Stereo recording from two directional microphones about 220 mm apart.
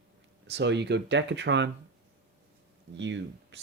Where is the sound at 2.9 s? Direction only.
55° right (ahead or behind).